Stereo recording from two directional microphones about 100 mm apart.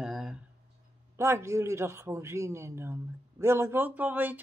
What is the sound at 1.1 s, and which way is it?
A man's voice, 30° right (ahead or behind).